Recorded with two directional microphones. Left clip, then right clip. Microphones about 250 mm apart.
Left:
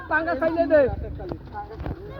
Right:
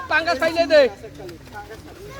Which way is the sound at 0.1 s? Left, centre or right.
Right.